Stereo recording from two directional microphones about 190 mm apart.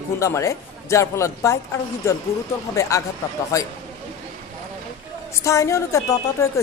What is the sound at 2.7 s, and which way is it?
Speech, 15° left (ahead or behind).